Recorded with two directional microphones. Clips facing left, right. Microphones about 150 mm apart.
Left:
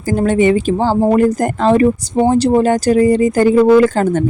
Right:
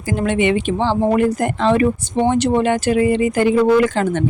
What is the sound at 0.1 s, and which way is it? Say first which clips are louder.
Speech: left 5 dB; 40° left (ahead or behind).